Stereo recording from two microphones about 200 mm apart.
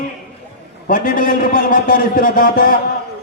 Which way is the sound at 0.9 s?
45° left (ahead or behind).